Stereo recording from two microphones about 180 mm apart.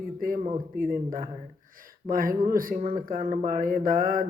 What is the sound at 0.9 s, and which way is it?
Speech, 50° right (ahead or behind).